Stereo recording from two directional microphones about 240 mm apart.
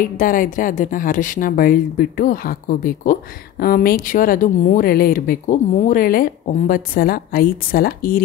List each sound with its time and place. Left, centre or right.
0.2 s a woman's voice: left